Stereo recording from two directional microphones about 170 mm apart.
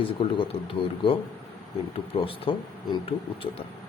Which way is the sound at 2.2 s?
30° left (ahead or behind).